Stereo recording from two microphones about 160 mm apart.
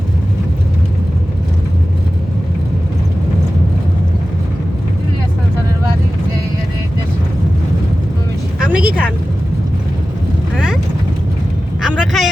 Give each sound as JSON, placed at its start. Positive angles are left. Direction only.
{"t": 8.7, "sound": "vehicle", "side_deg": -10}
{"t": 11.8, "sound": "vehicle", "side_deg": 0}